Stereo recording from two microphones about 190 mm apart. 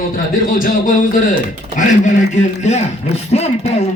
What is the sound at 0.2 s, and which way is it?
A man's voice, 45° left (ahead or behind).